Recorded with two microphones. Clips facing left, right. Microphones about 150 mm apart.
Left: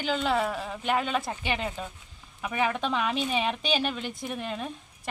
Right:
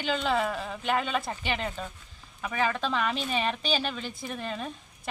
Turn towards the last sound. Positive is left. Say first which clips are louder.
# left 1 dB
turn(degrees=5)  # may be behind; listen again after turning